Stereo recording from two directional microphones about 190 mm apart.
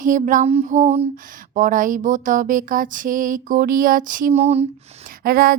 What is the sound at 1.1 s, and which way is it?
Speech, 45° right (ahead or behind).